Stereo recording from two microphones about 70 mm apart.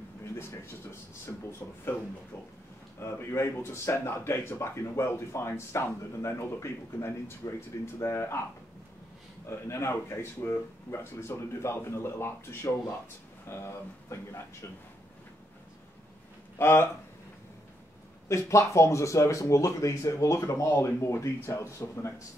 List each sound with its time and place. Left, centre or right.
0.2 s a sound: left
1.6 s speech: left
3.0 s speech: left
9.5 s speech: left
16.5 s speech: left
18.3 s speech: left